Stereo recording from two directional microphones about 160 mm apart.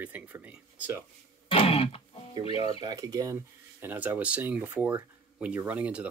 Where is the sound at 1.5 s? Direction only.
35° left (ahead or behind).